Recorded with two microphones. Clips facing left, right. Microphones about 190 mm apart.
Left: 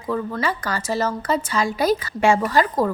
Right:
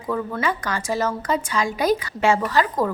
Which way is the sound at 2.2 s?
15° left (ahead or behind).